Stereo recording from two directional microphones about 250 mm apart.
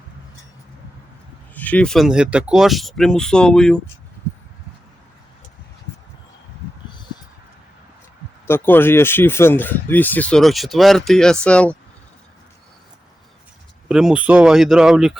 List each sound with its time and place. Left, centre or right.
1.5 s speech: centre
8.4 s speech: centre
13.8 s speech: centre